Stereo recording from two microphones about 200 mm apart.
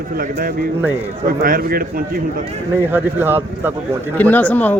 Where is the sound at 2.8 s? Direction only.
10° right (ahead or behind).